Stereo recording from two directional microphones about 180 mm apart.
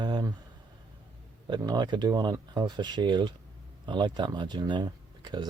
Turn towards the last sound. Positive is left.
turn(degrees=-25)  # may be behind; listen again after turning